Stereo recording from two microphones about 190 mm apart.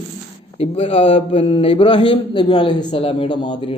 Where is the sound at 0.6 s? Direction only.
30° left (ahead or behind).